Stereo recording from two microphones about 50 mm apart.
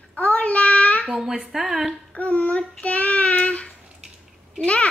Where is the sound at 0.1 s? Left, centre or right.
Left.